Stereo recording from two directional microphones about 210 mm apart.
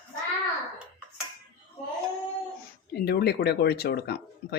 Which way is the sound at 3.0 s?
50° left (ahead or behind).